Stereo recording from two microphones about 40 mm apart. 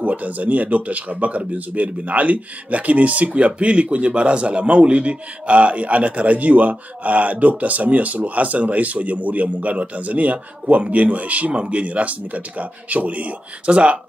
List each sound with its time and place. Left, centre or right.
0.0 s speech: right